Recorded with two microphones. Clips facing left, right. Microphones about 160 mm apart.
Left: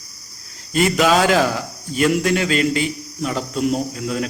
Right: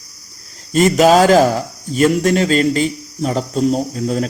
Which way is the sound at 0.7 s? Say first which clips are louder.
Right 5 dB; 40° right (ahead or behind).